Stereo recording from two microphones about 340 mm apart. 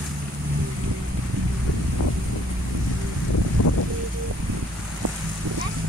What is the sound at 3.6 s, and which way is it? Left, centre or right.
Boat, left.